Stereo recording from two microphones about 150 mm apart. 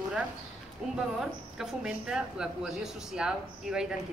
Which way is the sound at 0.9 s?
5° right (ahead or behind).